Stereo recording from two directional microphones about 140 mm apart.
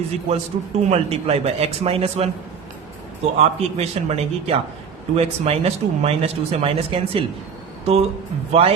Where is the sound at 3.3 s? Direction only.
45° right (ahead or behind).